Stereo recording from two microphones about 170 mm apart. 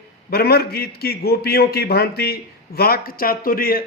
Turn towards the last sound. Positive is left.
turn(degrees=60)  # may be behind; listen again after turning